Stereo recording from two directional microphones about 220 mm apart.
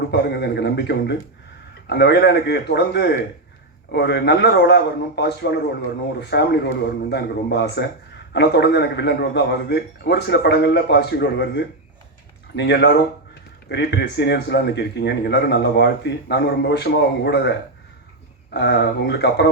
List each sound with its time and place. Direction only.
0.1 s a man's voice: 50° left (ahead or behind)
18.5 s a man's voice: 45° left (ahead or behind)